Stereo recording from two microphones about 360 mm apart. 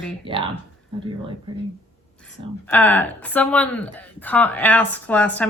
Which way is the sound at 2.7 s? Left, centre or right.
Centre.